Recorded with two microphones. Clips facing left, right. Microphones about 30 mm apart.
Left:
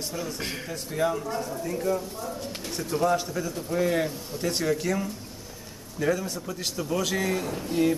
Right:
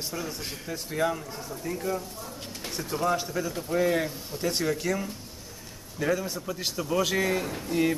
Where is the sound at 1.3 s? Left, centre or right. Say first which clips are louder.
Left 7 dB; centre.